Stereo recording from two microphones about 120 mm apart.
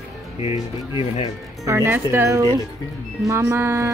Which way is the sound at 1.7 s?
20° right (ahead or behind).